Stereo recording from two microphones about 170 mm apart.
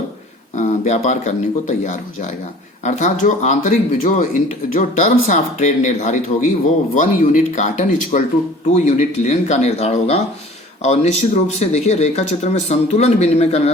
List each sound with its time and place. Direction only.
0.5 s speech: 45° left (ahead or behind)